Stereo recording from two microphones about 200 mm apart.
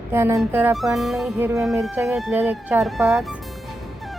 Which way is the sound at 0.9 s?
Centre (ahead or behind).